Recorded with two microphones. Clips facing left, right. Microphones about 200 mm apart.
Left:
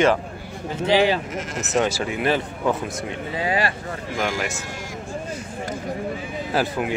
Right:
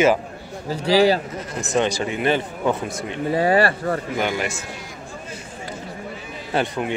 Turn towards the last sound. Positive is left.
turn(degrees=5)  # may be behind; listen again after turning